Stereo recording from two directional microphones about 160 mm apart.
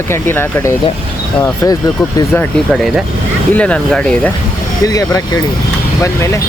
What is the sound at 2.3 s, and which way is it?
Speech, 10° left (ahead or behind).